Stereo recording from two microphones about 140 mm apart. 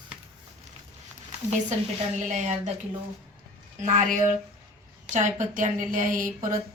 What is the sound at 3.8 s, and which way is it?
A woman's voice, 65° right (ahead or behind).